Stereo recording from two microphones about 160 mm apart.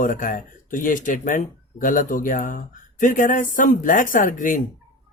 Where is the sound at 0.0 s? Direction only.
55° left (ahead or behind).